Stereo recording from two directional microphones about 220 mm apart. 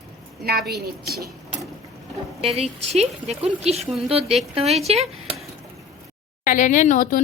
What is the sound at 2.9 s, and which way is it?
Speech, 30° right (ahead or behind).